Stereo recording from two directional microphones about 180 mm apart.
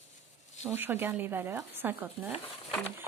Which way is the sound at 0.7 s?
10° right (ahead or behind).